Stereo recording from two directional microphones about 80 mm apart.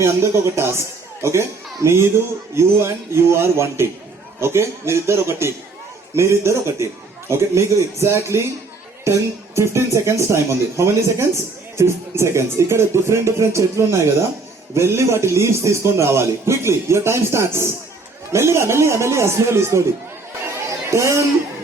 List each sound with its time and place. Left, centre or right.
0.0 s speech: right
20.7 s chatter: right